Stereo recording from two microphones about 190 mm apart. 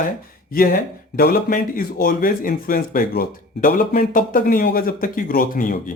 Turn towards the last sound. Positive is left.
turn(degrees=45)  # may be behind; listen again after turning